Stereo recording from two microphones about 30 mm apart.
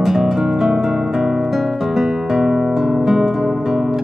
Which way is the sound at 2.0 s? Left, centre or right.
Centre.